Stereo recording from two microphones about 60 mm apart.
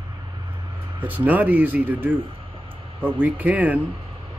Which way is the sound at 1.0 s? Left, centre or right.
Right.